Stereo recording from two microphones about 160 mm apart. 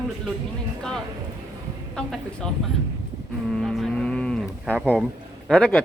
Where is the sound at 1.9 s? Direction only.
5° left (ahead or behind).